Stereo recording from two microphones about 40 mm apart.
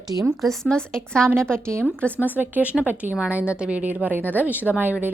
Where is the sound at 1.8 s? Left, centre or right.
Left.